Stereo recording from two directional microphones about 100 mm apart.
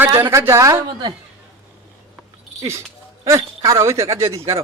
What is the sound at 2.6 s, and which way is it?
Speech, 30° right (ahead or behind).